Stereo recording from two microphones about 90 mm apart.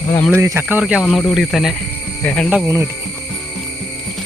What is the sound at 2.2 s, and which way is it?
Speech, 10° left (ahead or behind).